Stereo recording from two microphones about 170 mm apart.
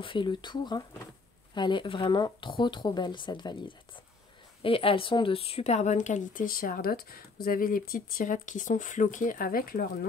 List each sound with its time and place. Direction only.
0.0 s speech: 30° left (ahead or behind); by 9.8 s 60° left (ahead or behind)